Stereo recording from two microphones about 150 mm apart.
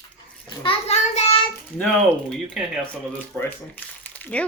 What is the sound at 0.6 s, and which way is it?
Speech, 40° left (ahead or behind).